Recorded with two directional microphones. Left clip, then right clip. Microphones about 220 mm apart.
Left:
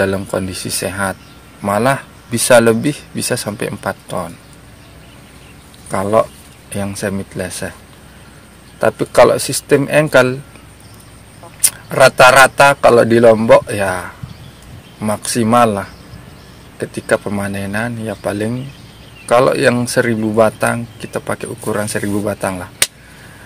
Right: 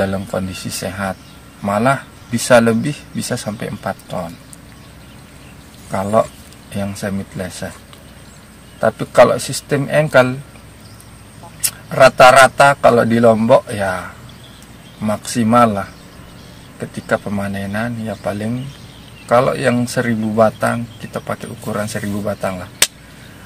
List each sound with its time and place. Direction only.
0.0 s speech: 55° left (ahead or behind)
5.9 s speech: 50° left (ahead or behind)
8.8 s speech: 55° left (ahead or behind)
11.9 s speech: 55° left (ahead or behind)
16.9 s speech: 55° left (ahead or behind)